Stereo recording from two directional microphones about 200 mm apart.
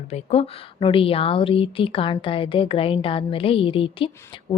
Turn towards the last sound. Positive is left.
turn(degrees=25)  # may be behind; listen again after turning